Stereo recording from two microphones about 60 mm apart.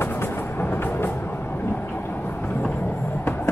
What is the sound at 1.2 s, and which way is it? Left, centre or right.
Vehicle, left.